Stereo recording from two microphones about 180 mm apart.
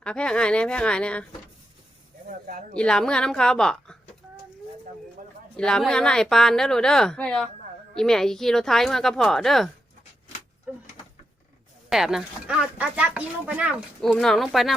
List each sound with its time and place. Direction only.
0.0 s speech: 5° left (ahead or behind)
2.7 s speech: 5° left (ahead or behind)
5.5 s speech: 5° left (ahead or behind)
10.7 s a sound: 5° right (ahead or behind)
11.9 s speech: centre (ahead or behind)